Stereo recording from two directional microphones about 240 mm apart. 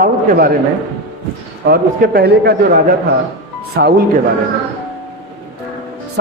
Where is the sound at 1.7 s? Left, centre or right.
Right.